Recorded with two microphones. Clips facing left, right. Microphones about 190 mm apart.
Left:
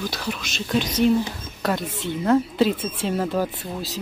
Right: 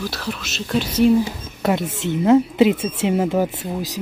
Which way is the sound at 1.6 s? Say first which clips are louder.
Right 4 dB; 20° right (ahead or behind).